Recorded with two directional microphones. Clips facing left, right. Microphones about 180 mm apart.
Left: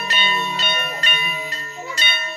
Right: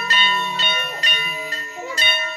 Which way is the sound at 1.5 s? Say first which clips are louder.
Right 1 dB; 10° right (ahead or behind).